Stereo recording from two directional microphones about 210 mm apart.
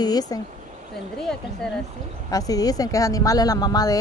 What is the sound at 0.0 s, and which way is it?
Speech, 20° left (ahead or behind).